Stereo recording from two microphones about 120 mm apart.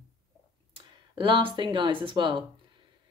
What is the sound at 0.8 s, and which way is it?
Speech, 45° right (ahead or behind).